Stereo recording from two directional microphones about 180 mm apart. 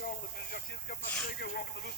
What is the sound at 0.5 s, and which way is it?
Speech, 60° left (ahead or behind).